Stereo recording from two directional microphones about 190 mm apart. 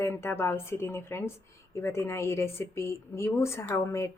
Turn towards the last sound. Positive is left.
turn(degrees=15)  # may be behind; listen again after turning